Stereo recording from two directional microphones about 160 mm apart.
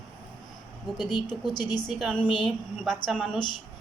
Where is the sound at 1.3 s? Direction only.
25° left (ahead or behind).